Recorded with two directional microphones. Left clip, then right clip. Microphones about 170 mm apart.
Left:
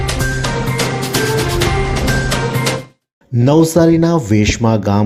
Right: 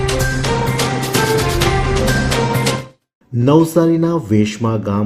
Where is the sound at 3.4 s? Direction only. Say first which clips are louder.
Left 2 dB; 45° left (ahead or behind).